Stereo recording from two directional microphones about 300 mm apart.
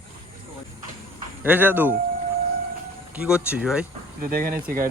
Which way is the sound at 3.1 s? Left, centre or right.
Centre.